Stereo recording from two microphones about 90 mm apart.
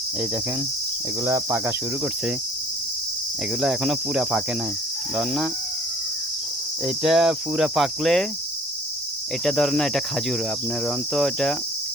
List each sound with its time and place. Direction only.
1.2 s cricket: 30° right (ahead or behind)
3.6 s speech: 5° right (ahead or behind)
5.1 s cricket: 10° right (ahead or behind)
6.8 s cricket: 5° right (ahead or behind)
8.0 s speech: 5° left (ahead or behind)
9.4 s speech: 5° left (ahead or behind)